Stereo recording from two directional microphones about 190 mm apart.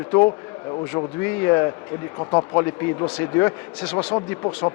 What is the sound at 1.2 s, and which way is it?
A man's voice, 10° left (ahead or behind).